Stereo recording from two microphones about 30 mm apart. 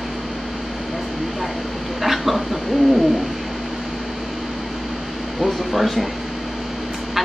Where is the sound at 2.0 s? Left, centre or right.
Centre.